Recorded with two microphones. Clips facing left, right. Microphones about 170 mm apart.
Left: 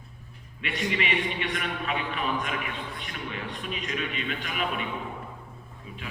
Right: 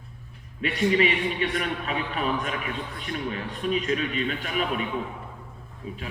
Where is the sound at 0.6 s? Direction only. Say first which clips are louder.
Right 8 dB; 40° right (ahead or behind).